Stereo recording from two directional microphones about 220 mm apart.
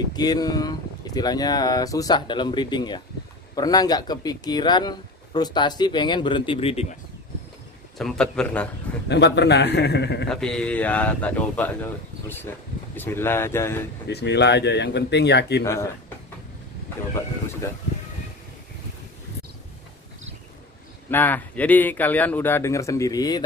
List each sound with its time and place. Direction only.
0.1 s speech: 20° left (ahead or behind)
8.0 s a man's voice: 5° left (ahead or behind)
9.1 s speech: 50° left (ahead or behind)
10.2 s speech: 5° left (ahead or behind)
14.0 s speech: 50° left (ahead or behind)
15.6 s speech: 15° left (ahead or behind)
21.1 s speech: 10° left (ahead or behind)